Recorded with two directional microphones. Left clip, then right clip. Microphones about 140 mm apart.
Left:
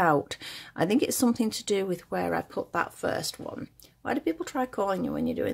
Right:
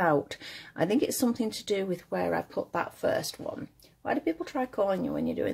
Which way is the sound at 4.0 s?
40° left (ahead or behind).